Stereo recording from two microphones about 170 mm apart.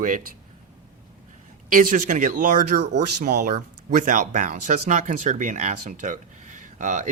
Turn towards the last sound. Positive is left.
turn(degrees=-45)  # may be behind; listen again after turning